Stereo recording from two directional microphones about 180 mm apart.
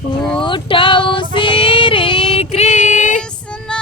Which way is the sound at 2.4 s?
40° left (ahead or behind).